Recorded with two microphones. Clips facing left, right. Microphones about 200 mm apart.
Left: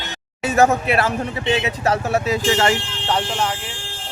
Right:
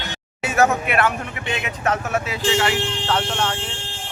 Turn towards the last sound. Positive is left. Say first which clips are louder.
# left 1 dB
turn(degrees=10)  # may be behind; listen again after turning